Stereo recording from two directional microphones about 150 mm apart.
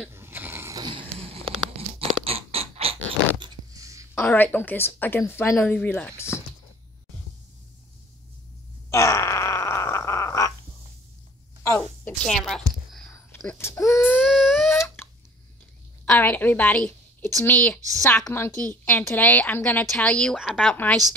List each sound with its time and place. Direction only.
0.1 s a sound: 15° right (ahead or behind)
4.1 s a woman's voice: 15° left (ahead or behind)
8.9 s wail: 20° left (ahead or behind)
11.8 s a sound: 5° left (ahead or behind)
13.6 s a woman's voice: 20° left (ahead or behind)
13.9 s baby cry: centre (ahead or behind)
14.7 s a sound: 15° left (ahead or behind)
16.1 s a woman's voice: 10° left (ahead or behind); by 20.7 s 5° right (ahead or behind)
20.7 s a woman's voice: 15° left (ahead or behind)